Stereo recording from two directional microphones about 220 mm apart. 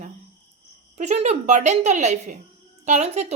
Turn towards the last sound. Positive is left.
turn(degrees=-30)  # may be behind; listen again after turning